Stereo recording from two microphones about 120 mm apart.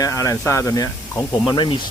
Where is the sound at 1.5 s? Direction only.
40° left (ahead or behind).